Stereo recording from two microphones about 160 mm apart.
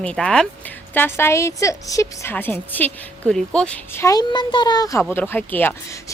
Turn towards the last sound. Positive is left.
turn(degrees=10)  # may be behind; listen again after turning